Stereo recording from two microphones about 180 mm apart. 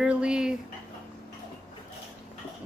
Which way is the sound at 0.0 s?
5° right (ahead or behind).